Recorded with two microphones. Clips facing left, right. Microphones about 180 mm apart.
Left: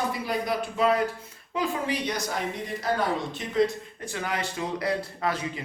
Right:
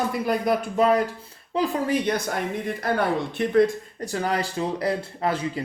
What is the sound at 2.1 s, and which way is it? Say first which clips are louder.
Speech: right 5 dB; 55° right (ahead or behind).